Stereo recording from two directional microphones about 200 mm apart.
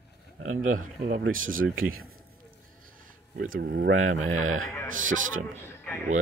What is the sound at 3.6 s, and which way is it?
Speech, 55° right (ahead or behind).